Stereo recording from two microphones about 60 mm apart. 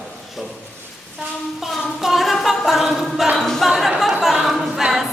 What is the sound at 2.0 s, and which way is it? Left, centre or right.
A man's voice, centre.